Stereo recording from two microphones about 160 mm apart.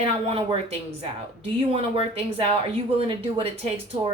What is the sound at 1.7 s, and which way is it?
Speech, 40° right (ahead or behind).